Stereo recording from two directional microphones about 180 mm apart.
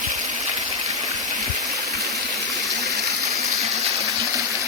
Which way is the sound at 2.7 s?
Centre (ahead or behind).